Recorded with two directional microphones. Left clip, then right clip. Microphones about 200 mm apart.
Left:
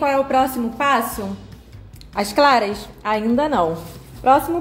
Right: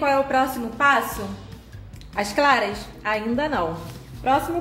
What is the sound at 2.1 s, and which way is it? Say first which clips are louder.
A woman's voice: left 4 dB; 30° left (ahead or behind).